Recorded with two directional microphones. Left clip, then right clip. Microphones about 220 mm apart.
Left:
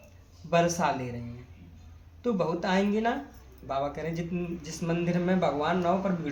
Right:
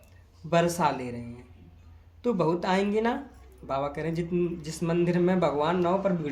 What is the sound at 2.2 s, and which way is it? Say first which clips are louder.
Speech: right 2 dB; 45° right (ahead or behind).